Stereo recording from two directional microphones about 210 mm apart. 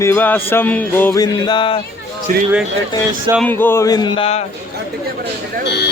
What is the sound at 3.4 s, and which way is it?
Music, 10° left (ahead or behind).